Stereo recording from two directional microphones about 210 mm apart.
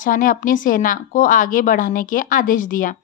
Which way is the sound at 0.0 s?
40° left (ahead or behind).